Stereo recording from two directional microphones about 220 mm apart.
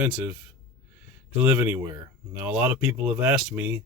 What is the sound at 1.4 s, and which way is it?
Speech, 10° right (ahead or behind).